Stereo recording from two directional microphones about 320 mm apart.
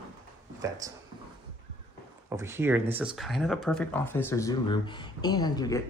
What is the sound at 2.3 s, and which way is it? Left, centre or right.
Speech, centre.